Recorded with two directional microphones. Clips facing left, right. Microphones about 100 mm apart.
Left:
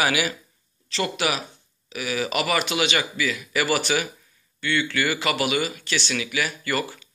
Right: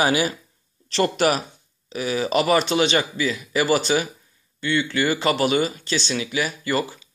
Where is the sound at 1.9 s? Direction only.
25° right (ahead or behind).